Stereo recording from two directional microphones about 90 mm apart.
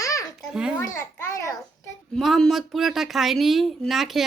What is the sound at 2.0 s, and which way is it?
Speech, centre (ahead or behind).